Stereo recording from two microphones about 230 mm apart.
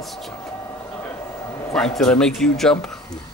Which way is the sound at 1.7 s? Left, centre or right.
Centre.